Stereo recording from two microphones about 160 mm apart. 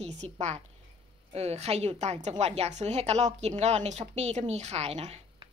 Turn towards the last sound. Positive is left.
turn(degrees=-40)  # may be behind; listen again after turning